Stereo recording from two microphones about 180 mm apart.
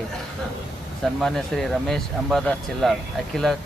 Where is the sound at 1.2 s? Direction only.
Centre (ahead or behind).